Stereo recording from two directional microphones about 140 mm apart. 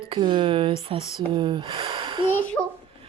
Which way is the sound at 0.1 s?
35° right (ahead or behind).